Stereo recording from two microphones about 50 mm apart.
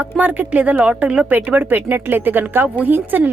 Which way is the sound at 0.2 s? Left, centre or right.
Right.